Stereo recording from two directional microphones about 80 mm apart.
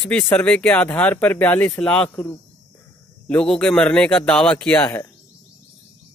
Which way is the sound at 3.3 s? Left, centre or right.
Centre.